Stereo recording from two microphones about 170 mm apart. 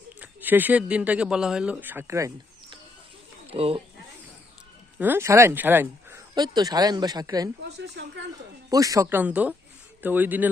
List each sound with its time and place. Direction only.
0.2 s speech: 10° right (ahead or behind)
3.4 s speech: 35° right (ahead or behind)
4.9 s speech: 10° right (ahead or behind)
6.3 s speech: 25° right (ahead or behind)
7.8 s speech: 90° right
8.7 s speech: 20° right (ahead or behind)